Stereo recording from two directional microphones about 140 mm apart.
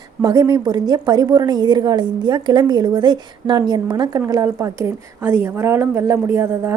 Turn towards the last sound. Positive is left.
turn(degrees=-20)  # may be behind; listen again after turning